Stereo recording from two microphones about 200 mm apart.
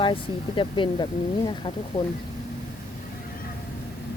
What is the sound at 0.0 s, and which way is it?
Speech, 25° left (ahead or behind).